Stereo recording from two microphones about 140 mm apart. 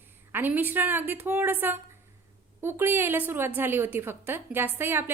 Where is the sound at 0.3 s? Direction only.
15° right (ahead or behind).